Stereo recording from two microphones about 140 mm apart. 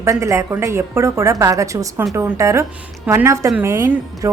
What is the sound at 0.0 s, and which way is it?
A woman's voice, 20° right (ahead or behind).